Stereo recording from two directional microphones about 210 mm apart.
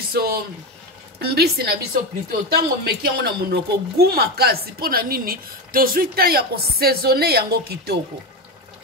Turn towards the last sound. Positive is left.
turn(degrees=-50)  # may be behind; listen again after turning